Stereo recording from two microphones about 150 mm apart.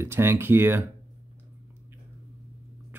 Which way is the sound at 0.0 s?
15° right (ahead or behind).